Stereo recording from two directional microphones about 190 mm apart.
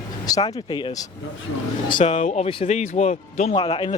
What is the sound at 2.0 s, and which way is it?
Speech, 40° left (ahead or behind).